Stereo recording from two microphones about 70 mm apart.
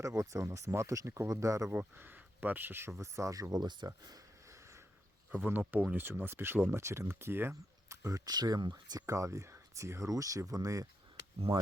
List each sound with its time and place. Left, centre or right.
0.0 s speech: right
1.7 s speech: right
3.0 s speech: right
3.5 s speech: right
4.4 s a sound: right
5.3 s speech: right